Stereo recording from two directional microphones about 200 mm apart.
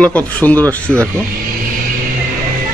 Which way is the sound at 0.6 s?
15° right (ahead or behind).